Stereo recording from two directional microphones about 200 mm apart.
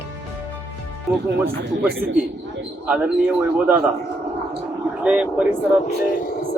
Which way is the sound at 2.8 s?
5° right (ahead or behind).